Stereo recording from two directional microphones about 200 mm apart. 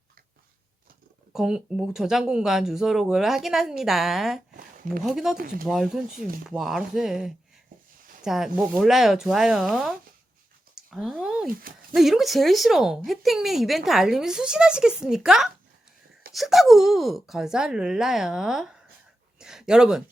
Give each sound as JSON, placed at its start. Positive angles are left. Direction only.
{"t": 1.3, "sound": "a woman's voice", "side_deg": -5}
{"t": 5.4, "sound": "speech", "side_deg": -45}
{"t": 5.6, "sound": "a woman's voice", "side_deg": 0}
{"t": 11.5, "sound": "speech", "side_deg": -45}
{"t": 11.9, "sound": "a woman's voice", "side_deg": 0}
{"t": 19.4, "sound": "a sound", "side_deg": -5}